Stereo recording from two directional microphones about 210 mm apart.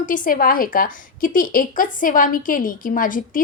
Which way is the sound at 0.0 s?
40° left (ahead or behind).